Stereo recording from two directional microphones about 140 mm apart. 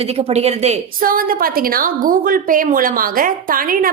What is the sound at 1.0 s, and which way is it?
A woman's voice, 90° right.